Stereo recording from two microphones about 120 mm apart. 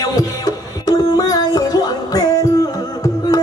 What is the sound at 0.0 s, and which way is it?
Music, 35° left (ahead or behind).